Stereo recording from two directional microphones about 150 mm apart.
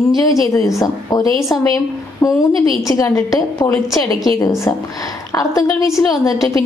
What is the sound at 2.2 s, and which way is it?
A woman's voice, 20° left (ahead or behind).